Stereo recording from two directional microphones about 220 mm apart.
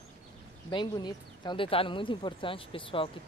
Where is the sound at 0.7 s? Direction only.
20° left (ahead or behind).